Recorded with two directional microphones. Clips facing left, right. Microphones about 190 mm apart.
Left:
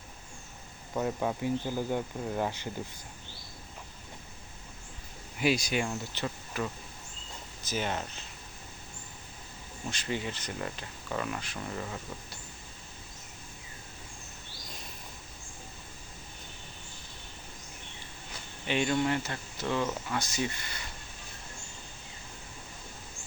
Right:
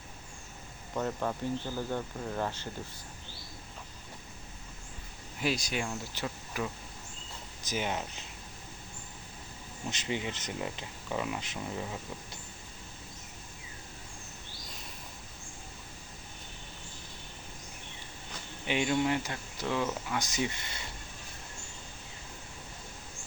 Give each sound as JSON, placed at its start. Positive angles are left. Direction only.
{"t": 0.9, "sound": "speech", "side_deg": 10}
{"t": 5.4, "sound": "speech", "side_deg": 5}
{"t": 9.9, "sound": "speech", "side_deg": -20}
{"t": 18.6, "sound": "speech", "side_deg": -10}
{"t": 19.6, "sound": "speech", "side_deg": 0}
{"t": 20.1, "sound": "speech", "side_deg": -15}